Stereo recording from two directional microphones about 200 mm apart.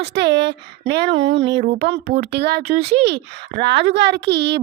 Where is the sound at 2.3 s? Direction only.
55° right (ahead or behind).